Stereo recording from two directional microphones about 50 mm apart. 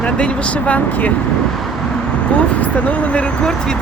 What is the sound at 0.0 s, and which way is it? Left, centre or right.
Speech, left.